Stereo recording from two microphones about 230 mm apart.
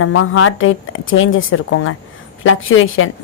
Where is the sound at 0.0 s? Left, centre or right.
Left.